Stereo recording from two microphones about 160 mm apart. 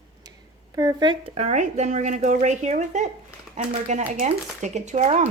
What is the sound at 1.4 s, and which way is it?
Speech, 45° right (ahead or behind).